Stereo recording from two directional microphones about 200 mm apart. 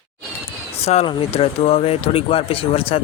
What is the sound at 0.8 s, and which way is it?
Speech, 30° left (ahead or behind).